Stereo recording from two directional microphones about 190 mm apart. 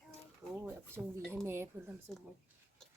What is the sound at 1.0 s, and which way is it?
Speech, 10° right (ahead or behind).